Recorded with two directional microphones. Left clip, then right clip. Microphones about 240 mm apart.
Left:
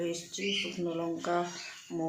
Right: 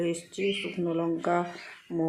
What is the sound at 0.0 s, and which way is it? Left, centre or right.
Speech, centre.